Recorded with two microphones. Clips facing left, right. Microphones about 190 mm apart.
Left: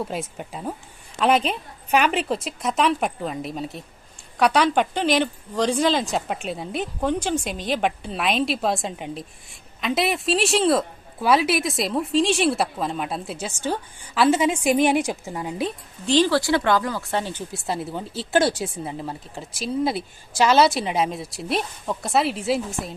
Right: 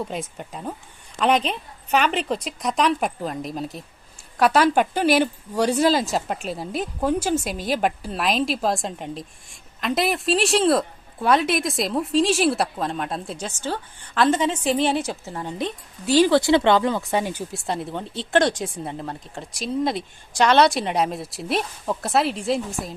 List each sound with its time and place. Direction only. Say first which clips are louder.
0.0 s a woman's voice: left 1 dB; 5° left (ahead or behind)
16.0 s speech: right 2 dB; 10° right (ahead or behind)
16.3 s speech: right 3 dB; 20° right (ahead or behind)
17.5 s a woman's voice: even; 5° left (ahead or behind)